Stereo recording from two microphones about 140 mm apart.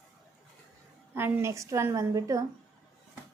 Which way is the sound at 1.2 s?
20° right (ahead or behind).